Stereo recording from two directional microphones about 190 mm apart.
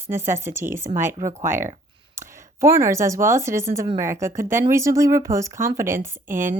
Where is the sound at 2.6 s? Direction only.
15° right (ahead or behind).